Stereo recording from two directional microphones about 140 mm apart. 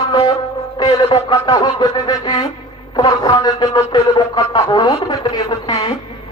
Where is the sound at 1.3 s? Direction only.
30° left (ahead or behind).